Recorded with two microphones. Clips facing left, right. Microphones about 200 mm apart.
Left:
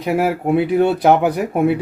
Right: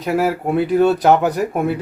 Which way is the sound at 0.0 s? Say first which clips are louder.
Even; 15° left (ahead or behind).